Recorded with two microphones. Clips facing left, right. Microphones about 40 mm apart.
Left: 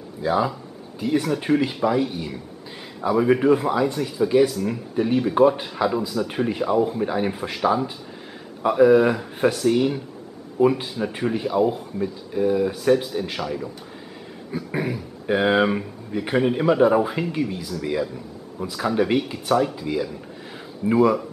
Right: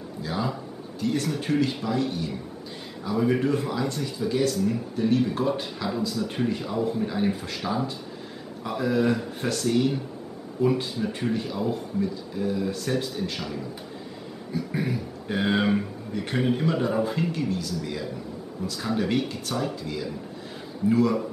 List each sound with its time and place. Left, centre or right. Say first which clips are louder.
0.2 s speech: left 8 dB; centre
6.4 s speech: left 6 dB; centre